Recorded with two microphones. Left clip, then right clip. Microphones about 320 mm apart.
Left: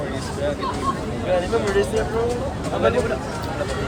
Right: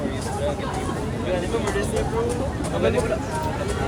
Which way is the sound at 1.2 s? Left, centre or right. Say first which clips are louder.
Left 5 dB; left.